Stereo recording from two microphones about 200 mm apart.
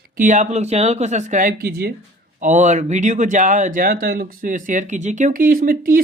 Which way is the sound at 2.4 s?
40° right (ahead or behind).